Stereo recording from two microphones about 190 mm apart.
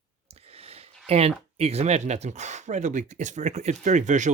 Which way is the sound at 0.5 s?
30° right (ahead or behind).